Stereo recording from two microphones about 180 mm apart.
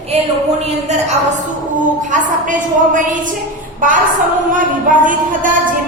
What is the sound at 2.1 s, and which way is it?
A woman's voice, 45° right (ahead or behind).